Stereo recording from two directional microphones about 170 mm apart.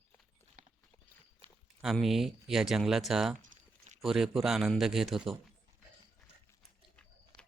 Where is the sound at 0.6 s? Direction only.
50° right (ahead or behind).